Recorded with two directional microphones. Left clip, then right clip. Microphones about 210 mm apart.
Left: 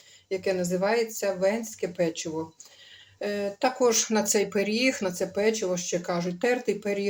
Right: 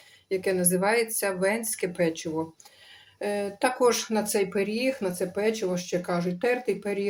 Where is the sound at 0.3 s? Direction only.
Centre (ahead or behind).